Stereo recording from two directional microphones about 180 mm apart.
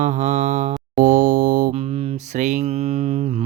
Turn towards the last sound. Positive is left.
turn(degrees=-35)  # may be behind; listen again after turning